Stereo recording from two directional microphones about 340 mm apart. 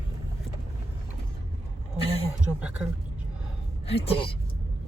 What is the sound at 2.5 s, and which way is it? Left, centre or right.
Speech, centre.